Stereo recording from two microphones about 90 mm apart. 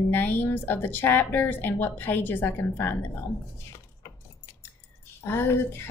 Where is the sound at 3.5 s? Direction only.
30° left (ahead or behind).